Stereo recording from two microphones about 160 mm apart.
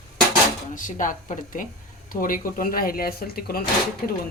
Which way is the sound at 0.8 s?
55° left (ahead or behind).